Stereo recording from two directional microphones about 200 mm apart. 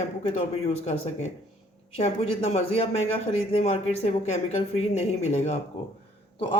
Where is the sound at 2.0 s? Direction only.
30° left (ahead or behind).